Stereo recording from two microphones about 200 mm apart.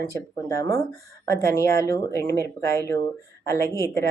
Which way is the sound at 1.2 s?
15° left (ahead or behind).